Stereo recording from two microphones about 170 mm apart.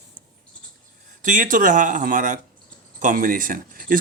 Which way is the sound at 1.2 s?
50° right (ahead or behind).